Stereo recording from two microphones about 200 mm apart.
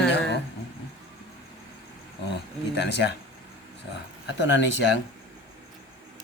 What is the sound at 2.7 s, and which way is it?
Speech, 55° left (ahead or behind).